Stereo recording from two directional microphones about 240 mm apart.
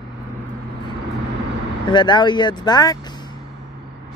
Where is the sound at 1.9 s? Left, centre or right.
Centre.